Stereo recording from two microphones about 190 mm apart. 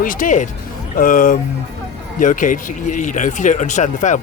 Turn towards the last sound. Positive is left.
turn(degrees=40)  # may be behind; listen again after turning